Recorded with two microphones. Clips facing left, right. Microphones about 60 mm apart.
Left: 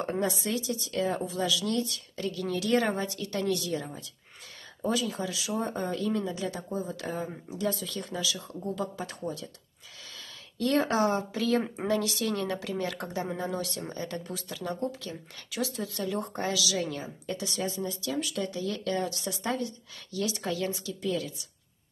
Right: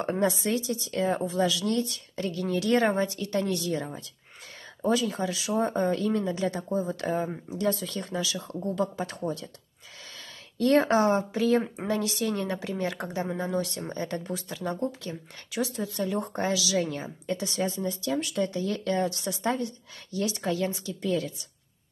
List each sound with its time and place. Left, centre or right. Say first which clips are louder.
0.2 s speech: right 4 dB; right
10.6 s a woman's voice: right 4 dB; right